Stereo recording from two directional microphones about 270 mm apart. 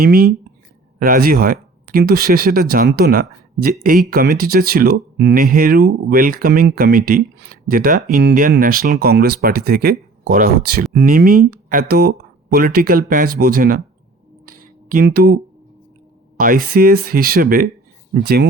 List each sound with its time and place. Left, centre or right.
0.0 s speech: right
14.4 s a sound: right
16.4 s speech: right